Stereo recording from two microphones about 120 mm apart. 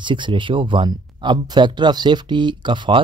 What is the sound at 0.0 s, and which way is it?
Speech, 40° right (ahead or behind).